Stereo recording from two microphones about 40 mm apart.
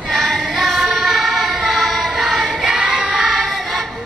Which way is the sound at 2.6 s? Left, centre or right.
Centre.